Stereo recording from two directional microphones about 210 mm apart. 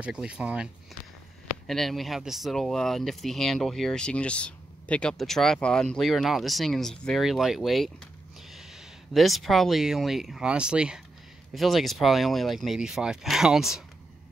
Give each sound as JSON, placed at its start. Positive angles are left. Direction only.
{"t": 0.0, "sound": "speech", "side_deg": -5}
{"t": 1.7, "sound": "speech", "side_deg": 0}